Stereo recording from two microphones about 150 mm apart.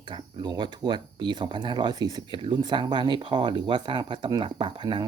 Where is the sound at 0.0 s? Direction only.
30° right (ahead or behind).